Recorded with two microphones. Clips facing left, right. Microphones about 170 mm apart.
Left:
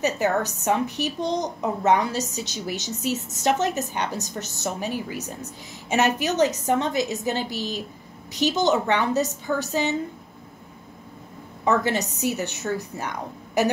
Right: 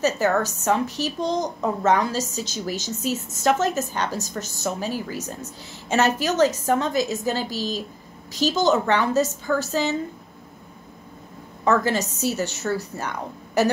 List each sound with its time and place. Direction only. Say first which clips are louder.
0.0 s a woman's voice: right 2 dB; 15° left (ahead or behind)
11.6 s a woman's voice: right 1 dB; 20° left (ahead or behind)